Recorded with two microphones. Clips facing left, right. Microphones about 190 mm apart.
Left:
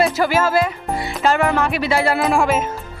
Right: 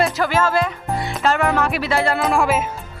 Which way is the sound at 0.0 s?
5° left (ahead or behind).